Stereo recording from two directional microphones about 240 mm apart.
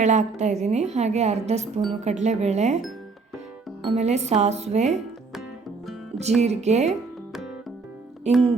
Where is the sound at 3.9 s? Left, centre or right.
Right.